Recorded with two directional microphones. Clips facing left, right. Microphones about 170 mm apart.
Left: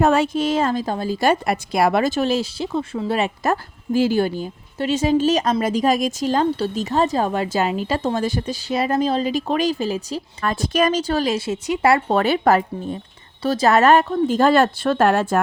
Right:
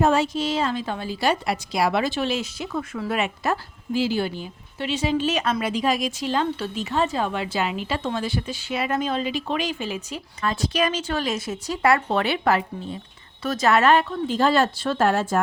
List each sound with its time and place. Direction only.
0.0 s a woman's voice: 60° left (ahead or behind); by 10.2 s 35° left (ahead or behind)
10.4 s a woman's voice: 50° left (ahead or behind)
13.4 s speech: 35° left (ahead or behind); by 15.4 s 60° left (ahead or behind)